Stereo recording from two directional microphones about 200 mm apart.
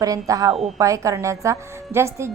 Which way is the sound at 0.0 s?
15° right (ahead or behind).